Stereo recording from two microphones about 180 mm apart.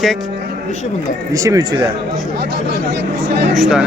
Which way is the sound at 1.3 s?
20° right (ahead or behind).